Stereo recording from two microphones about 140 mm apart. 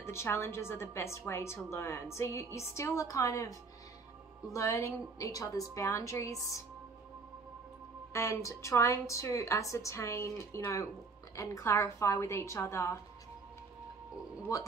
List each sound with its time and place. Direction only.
0.0 s a woman's voice: 20° left (ahead or behind)
8.1 s a woman's voice: 20° left (ahead or behind)
14.5 s a woman's voice: 25° left (ahead or behind)